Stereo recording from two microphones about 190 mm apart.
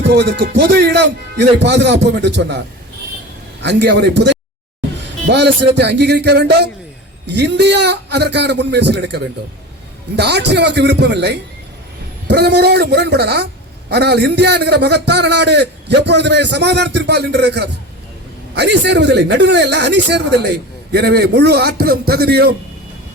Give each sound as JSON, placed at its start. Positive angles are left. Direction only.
{"t": 0.0, "sound": "a man's voice", "side_deg": -60}
{"t": 3.6, "sound": "a man's voice", "side_deg": -65}